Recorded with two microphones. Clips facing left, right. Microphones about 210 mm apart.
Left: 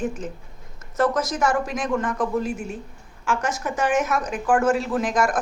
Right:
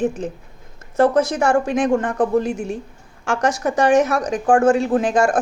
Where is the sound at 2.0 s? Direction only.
35° right (ahead or behind).